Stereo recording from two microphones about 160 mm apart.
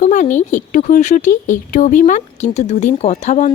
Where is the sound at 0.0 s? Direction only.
50° left (ahead or behind).